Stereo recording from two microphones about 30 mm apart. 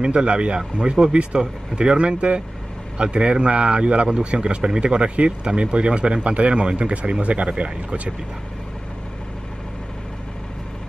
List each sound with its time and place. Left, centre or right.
0.0 s speech: right
1.3 s speech: right